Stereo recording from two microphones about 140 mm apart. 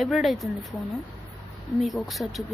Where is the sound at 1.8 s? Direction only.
Centre (ahead or behind).